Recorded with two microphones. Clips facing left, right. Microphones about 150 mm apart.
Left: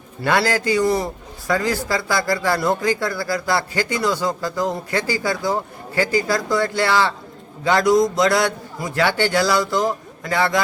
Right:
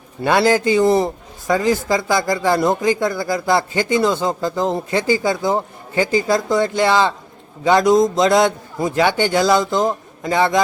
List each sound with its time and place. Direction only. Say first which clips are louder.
0.2 s a man's voice: right 4 dB; 20° right (ahead or behind)